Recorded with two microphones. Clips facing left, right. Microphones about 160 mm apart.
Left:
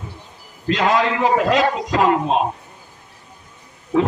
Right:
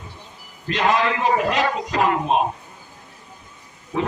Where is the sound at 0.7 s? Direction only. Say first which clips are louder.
Left 2 dB; 90° left.